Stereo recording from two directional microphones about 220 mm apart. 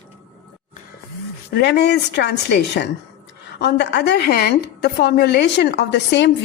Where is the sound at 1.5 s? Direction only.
50° left (ahead or behind).